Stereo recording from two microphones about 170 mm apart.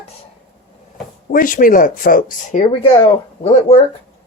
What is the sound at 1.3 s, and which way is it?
Speech, 55° left (ahead or behind).